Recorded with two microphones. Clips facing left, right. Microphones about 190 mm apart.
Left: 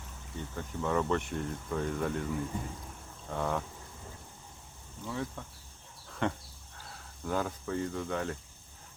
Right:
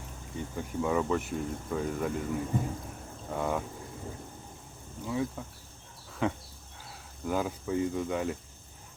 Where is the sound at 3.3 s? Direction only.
10° right (ahead or behind).